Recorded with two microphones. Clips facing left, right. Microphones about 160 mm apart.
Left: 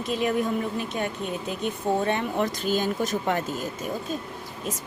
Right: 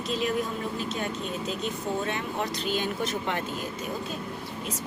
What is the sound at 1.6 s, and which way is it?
Speech, 55° left (ahead or behind).